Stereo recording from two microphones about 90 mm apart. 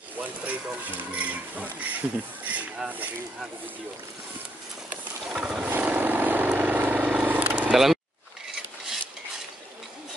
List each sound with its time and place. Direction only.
0.2 s speech: 15° right (ahead or behind)
4.8 s vehicle: 15° right (ahead or behind)
7.7 s a sound: 5° right (ahead or behind)